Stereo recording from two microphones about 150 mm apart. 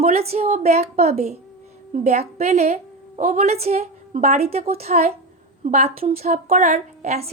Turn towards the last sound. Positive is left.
turn(degrees=-45)  # may be behind; listen again after turning